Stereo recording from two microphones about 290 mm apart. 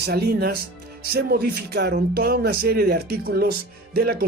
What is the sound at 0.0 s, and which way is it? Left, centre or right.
Speech, right.